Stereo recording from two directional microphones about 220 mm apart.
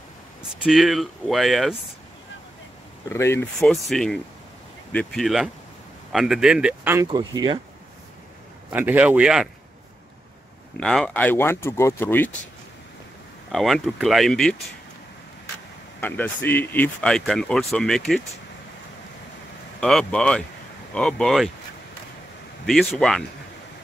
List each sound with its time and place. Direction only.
0.7 s speech: centre (ahead or behind)
3.1 s speech: 10° left (ahead or behind)
3.6 s speech: centre (ahead or behind); by 7.6 s 20° right (ahead or behind)
8.6 s speech: 10° right (ahead or behind)
10.8 s speech: centre (ahead or behind)
13.5 s speech: centre (ahead or behind)
16.0 s speech: 10° left (ahead or behind)
19.8 s speech: 5° left (ahead or behind)
22.7 s speech: centre (ahead or behind)